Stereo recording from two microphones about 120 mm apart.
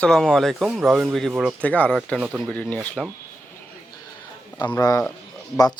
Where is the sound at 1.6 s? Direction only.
10° left (ahead or behind).